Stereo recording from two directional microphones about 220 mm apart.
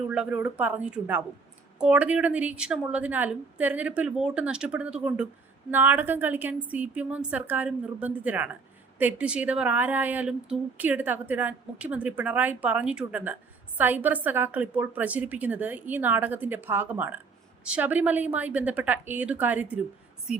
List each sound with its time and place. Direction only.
0.1 s a woman's voice: 5° right (ahead or behind)